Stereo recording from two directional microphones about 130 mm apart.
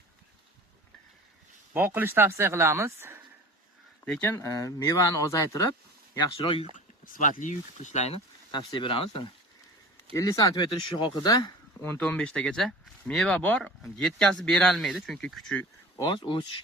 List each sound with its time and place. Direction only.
1.7 s speech: 15° right (ahead or behind)
4.0 s speech: 5° left (ahead or behind)
4.3 s speech: 20° left (ahead or behind)
6.3 s speech: 45° left (ahead or behind)
6.7 s speech: 85° left; by 8.2 s 55° left (ahead or behind)
8.5 s speech: 40° left (ahead or behind)
10.2 s speech: 25° left (ahead or behind)
11.8 s speech: 15° left (ahead or behind)
16.0 s speech: 40° left (ahead or behind)